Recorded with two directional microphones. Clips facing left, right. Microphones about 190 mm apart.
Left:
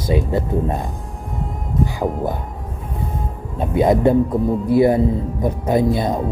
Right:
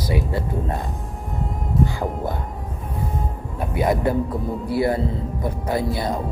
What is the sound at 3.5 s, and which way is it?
Speech, 25° left (ahead or behind).